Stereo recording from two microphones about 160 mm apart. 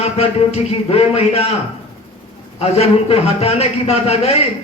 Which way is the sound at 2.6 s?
35° left (ahead or behind).